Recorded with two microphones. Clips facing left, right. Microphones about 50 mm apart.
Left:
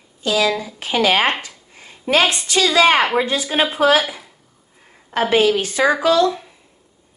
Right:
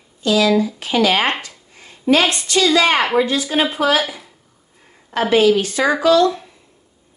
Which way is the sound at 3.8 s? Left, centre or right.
Centre.